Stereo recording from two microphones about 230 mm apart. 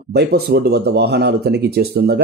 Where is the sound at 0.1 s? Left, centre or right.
Right.